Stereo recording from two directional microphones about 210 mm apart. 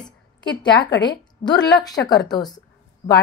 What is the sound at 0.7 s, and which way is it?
Speech, 55° left (ahead or behind).